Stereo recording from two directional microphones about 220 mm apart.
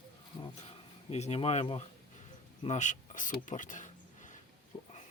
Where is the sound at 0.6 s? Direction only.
30° left (ahead or behind).